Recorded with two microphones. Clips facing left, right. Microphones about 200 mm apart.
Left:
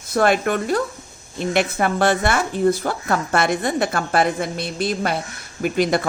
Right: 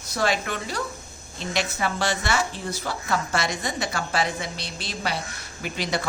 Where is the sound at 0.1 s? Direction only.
55° left (ahead or behind).